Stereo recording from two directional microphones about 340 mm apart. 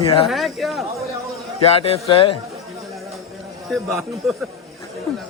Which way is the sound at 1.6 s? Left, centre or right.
Centre.